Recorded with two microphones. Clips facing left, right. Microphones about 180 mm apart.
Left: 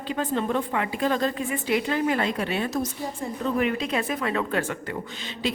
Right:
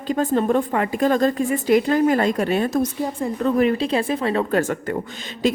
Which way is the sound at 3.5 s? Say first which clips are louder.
Right 6 dB; 35° right (ahead or behind).